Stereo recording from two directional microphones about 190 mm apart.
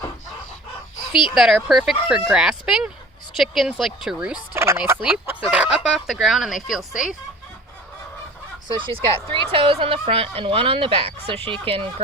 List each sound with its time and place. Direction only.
1.3 s speech: centre (ahead or behind)
4.5 s speech: 15° right (ahead or behind)
8.6 s speech: 25° right (ahead or behind)